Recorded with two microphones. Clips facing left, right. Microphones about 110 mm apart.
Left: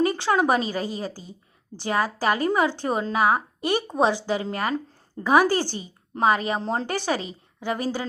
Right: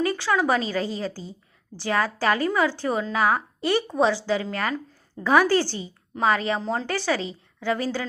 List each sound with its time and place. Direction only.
0.0 s a woman's voice: 25° left (ahead or behind)